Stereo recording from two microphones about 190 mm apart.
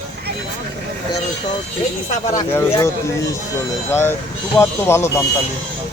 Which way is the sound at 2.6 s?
15° left (ahead or behind).